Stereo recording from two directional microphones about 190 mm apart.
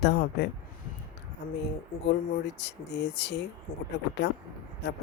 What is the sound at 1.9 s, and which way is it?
Speech, 50° left (ahead or behind).